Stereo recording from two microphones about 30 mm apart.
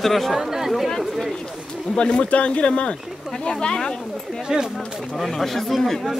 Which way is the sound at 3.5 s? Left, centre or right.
Left.